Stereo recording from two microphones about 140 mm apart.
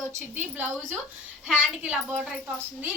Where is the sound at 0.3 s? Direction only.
15° right (ahead or behind).